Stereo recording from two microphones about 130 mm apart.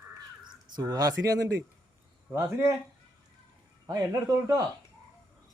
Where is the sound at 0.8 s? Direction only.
30° right (ahead or behind).